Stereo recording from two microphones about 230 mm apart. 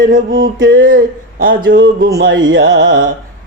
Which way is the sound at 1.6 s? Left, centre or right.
Right.